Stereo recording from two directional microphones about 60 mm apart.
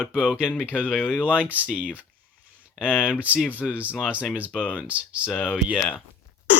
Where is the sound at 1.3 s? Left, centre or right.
Right.